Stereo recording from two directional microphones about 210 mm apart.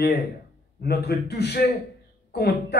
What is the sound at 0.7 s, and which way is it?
A man's voice, 50° left (ahead or behind).